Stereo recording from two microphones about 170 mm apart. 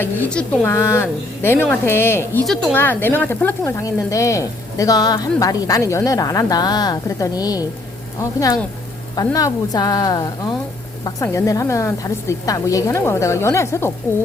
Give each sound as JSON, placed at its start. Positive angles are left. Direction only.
{"t": 0.0, "sound": "a woman's voice", "side_deg": 10}